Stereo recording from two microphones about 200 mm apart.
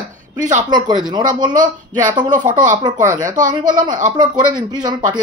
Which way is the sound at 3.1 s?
40° right (ahead or behind).